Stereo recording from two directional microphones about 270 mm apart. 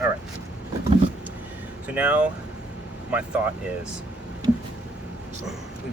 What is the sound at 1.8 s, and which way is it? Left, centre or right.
Speech, centre.